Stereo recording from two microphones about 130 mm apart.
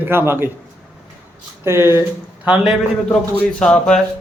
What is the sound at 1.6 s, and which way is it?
Speech, 20° right (ahead or behind).